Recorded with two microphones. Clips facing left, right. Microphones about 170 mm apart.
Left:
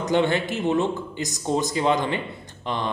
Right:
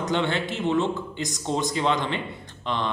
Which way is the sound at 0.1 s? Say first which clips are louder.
Left 5 dB; 10° left (ahead or behind).